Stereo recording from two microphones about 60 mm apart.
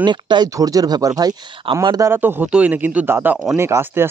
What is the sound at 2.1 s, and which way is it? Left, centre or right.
Speech, right.